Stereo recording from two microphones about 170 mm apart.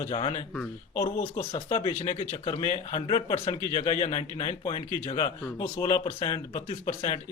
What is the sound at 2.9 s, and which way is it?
Speech, 30° left (ahead or behind).